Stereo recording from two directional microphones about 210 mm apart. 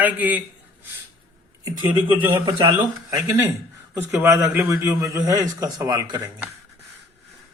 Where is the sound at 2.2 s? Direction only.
15° right (ahead or behind).